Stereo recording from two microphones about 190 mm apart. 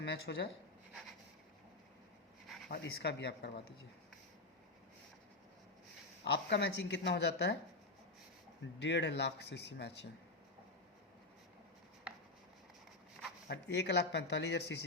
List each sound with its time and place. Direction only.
0.0 s speech: 60° left (ahead or behind)
2.6 s speech: 55° left (ahead or behind)
6.2 s speech: 65° left (ahead or behind)
8.8 s speech: 65° left (ahead or behind)
13.5 s speech: 65° left (ahead or behind)